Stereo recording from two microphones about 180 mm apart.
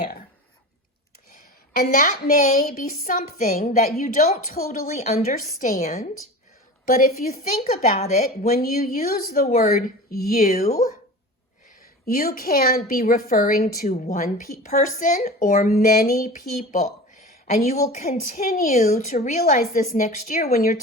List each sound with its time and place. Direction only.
1.4 s a woman's voice: 55° left (ahead or behind)
7.7 s a woman's voice: 35° left (ahead or behind)
8.2 s a woman's voice: 55° left (ahead or behind)
12.0 s a woman's voice: 55° left (ahead or behind)
17.4 s a woman's voice: 40° left (ahead or behind); by 20.7 s 55° left (ahead or behind)